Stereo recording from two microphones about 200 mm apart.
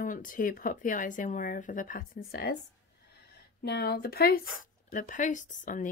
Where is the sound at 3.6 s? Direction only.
55° left (ahead or behind).